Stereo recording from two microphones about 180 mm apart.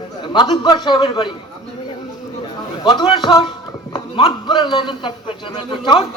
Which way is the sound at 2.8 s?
25° left (ahead or behind).